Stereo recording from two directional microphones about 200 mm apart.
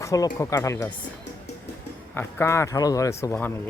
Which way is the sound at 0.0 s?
15° left (ahead or behind).